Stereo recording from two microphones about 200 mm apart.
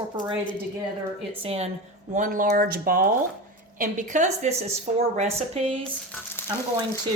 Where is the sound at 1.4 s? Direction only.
30° right (ahead or behind).